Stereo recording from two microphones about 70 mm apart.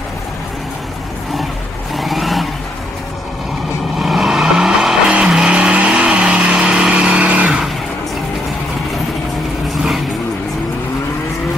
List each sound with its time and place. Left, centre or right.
2.0 s vehicle: centre
4.0 s vehicle: centre